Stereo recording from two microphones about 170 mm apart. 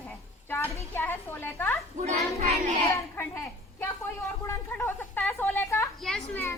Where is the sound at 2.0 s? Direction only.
45° right (ahead or behind).